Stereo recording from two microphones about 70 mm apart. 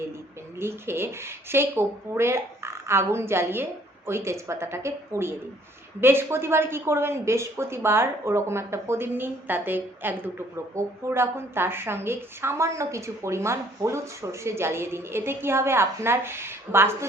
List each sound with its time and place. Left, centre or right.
0.6 s a woman's voice: right